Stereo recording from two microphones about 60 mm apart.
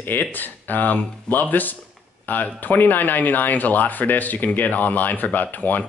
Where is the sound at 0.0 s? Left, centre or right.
Left.